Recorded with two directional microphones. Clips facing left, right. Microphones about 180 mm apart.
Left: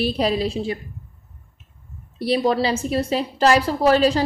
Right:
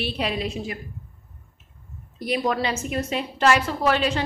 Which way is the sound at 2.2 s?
30° left (ahead or behind).